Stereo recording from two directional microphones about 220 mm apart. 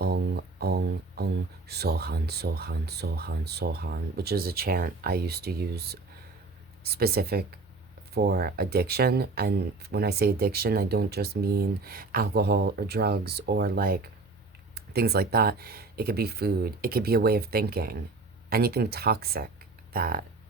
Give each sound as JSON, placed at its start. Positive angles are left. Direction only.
{"t": 0.0, "sound": "speech", "side_deg": -45}